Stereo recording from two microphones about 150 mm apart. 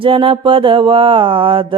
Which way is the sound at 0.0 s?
35° right (ahead or behind).